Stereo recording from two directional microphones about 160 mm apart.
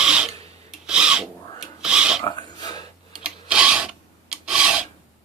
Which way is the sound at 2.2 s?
25° left (ahead or behind).